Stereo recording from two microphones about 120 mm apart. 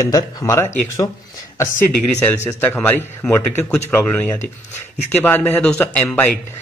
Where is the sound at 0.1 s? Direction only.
25° left (ahead or behind).